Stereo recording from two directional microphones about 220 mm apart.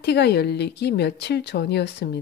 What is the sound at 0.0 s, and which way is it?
A woman's voice, 50° left (ahead or behind).